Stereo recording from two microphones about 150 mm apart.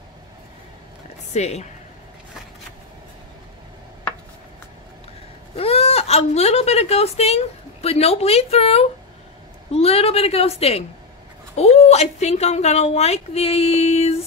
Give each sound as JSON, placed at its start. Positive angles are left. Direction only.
{"t": 1.3, "sound": "a woman's voice", "side_deg": 50}
{"t": 5.6, "sound": "a woman's voice", "side_deg": 40}